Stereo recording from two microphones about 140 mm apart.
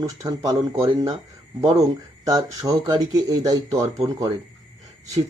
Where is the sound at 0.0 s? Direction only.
25° right (ahead or behind).